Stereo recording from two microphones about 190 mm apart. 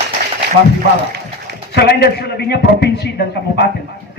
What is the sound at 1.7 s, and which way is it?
Speech, 60° left (ahead or behind).